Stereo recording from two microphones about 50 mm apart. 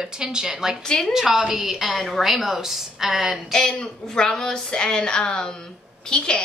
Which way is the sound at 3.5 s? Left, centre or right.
Centre.